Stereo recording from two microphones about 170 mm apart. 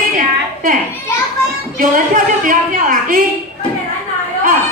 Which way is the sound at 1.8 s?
50° right (ahead or behind).